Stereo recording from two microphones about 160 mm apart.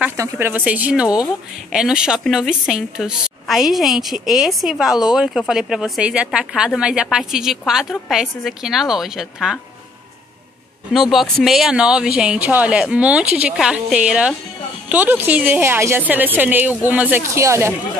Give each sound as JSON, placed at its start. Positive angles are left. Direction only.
{"t": 0.0, "sound": "a woman's voice", "side_deg": -15}
{"t": 10.9, "sound": "a woman's voice", "side_deg": 0}